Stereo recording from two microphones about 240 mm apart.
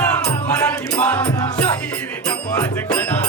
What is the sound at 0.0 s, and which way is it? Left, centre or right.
Music, centre.